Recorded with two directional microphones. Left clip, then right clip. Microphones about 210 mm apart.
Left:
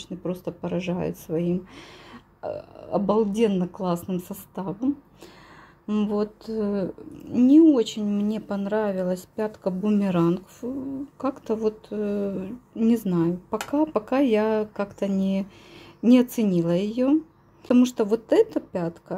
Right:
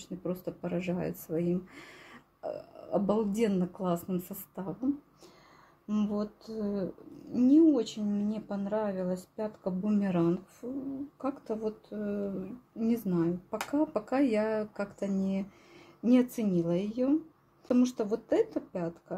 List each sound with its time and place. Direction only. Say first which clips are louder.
0.2 s speech: left 5 dB; 20° left (ahead or behind)
5.9 s speech: left 8 dB; 30° left (ahead or behind)